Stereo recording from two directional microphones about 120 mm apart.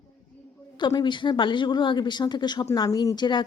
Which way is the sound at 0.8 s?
40° left (ahead or behind).